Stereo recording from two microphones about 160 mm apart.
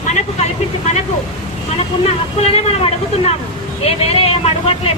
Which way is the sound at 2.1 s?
40° left (ahead or behind).